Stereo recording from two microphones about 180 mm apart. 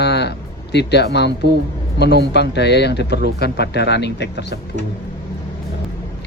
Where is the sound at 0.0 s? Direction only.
70° left (ahead or behind).